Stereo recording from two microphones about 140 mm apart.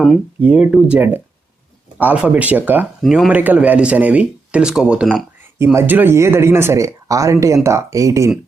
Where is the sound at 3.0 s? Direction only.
Centre (ahead or behind).